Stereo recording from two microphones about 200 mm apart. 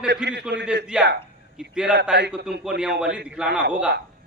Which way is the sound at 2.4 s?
55° right (ahead or behind).